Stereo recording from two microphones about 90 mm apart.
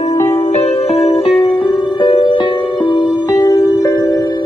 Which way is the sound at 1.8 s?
75° left (ahead or behind).